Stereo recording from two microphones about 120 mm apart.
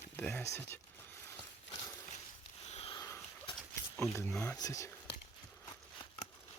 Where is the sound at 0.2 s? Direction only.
15° left (ahead or behind).